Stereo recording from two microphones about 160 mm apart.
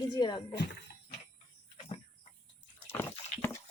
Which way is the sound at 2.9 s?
15° left (ahead or behind).